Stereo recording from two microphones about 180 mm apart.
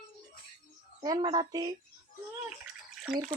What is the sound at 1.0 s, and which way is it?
Speech, 25° right (ahead or behind).